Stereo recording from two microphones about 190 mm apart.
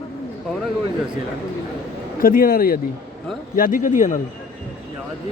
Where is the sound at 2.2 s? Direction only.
50° left (ahead or behind).